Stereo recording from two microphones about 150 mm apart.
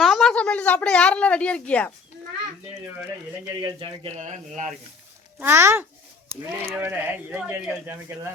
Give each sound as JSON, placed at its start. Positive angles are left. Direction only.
{"t": 0.0, "sound": "speech", "side_deg": 0}
{"t": 3.4, "sound": "speech", "side_deg": -25}
{"t": 4.2, "sound": "speech", "side_deg": -55}
{"t": 5.4, "sound": "speech", "side_deg": -15}